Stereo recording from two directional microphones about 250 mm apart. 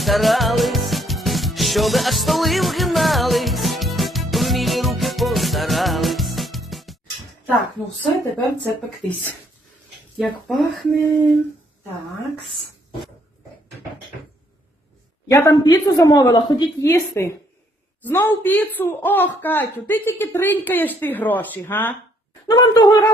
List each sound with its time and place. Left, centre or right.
0.0 s music: centre
8.2 s speech: centre
15.3 s a man's voice: centre